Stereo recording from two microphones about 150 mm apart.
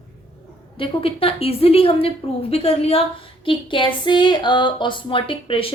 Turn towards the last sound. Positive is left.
turn(degrees=35)  # may be behind; listen again after turning